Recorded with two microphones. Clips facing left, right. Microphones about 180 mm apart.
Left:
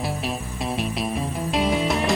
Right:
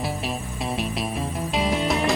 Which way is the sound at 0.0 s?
Centre (ahead or behind).